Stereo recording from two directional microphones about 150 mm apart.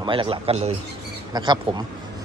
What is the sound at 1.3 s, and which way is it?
Speech, 25° right (ahead or behind).